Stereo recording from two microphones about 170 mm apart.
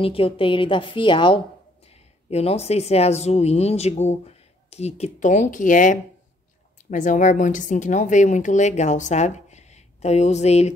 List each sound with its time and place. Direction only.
0.0 s a woman's voice: 30° left (ahead or behind)